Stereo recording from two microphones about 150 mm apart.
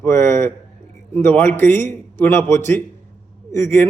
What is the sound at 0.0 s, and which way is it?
A man's voice, 15° left (ahead or behind).